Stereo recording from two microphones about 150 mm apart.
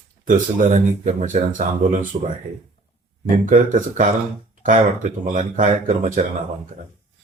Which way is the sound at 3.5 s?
60° right (ahead or behind).